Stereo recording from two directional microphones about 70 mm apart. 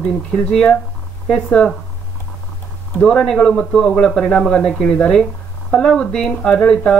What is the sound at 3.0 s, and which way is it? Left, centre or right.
Speech, centre.